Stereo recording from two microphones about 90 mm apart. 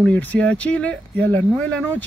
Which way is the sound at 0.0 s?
20° left (ahead or behind).